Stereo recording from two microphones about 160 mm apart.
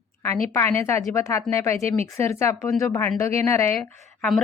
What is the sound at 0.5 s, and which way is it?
A woman's voice, 15° left (ahead or behind).